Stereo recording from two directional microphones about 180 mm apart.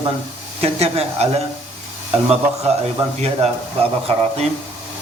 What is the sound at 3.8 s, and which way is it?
Speech, 30° right (ahead or behind).